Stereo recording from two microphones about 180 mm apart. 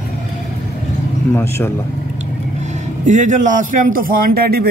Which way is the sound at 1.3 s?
15° left (ahead or behind).